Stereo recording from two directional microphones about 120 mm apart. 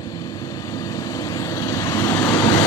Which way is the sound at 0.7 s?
30° left (ahead or behind).